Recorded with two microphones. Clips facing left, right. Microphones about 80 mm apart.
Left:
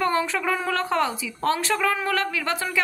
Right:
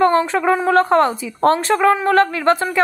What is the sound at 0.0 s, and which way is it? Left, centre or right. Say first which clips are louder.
A woman's voice: right 9 dB; right.